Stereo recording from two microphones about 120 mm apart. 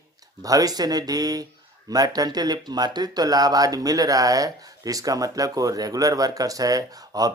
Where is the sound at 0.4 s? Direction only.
30° right (ahead or behind).